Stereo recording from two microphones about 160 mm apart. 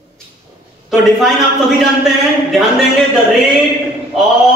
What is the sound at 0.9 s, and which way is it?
Speech, centre (ahead or behind).